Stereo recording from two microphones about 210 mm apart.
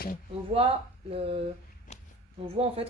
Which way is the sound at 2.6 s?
25° right (ahead or behind).